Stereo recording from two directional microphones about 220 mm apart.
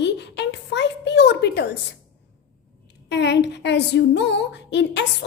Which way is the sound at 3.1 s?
55° left (ahead or behind).